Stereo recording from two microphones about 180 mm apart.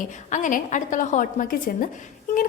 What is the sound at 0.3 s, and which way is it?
A woman's voice, 45° left (ahead or behind).